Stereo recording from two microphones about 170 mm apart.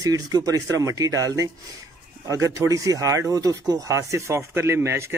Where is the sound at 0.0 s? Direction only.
20° right (ahead or behind).